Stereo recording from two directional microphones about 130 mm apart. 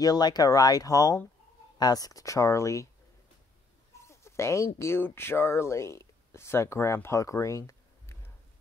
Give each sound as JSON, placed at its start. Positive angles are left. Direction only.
{"t": 0.0, "sound": "speech", "side_deg": 30}
{"t": 4.1, "sound": "speech", "side_deg": 20}